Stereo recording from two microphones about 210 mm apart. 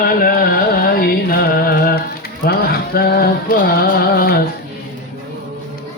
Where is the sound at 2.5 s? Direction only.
45° left (ahead or behind).